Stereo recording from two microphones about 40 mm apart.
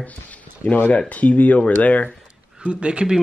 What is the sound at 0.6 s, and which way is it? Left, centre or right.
Speech, left.